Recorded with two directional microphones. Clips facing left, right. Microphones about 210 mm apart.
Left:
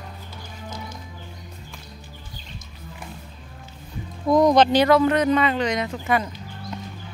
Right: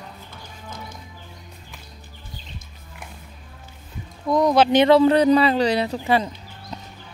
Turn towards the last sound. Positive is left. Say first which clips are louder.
# right 3 dB
turn(degrees=-30)  # may be behind; listen again after turning